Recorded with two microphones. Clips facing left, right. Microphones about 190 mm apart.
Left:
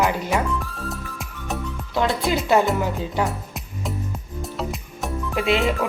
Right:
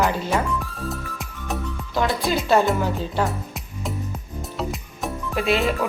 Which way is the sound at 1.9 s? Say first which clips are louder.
Left 1 dB; 20° left (ahead or behind).